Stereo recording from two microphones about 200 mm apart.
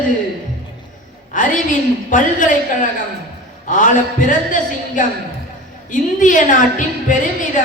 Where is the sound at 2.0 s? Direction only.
40° left (ahead or behind).